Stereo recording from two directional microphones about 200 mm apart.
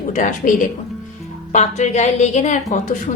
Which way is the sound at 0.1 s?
40° left (ahead or behind).